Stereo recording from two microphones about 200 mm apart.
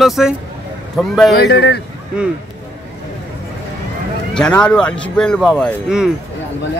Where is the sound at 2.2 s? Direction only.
5° right (ahead or behind).